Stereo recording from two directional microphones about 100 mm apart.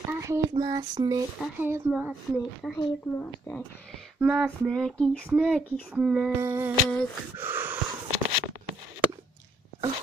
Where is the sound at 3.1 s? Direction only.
25° left (ahead or behind).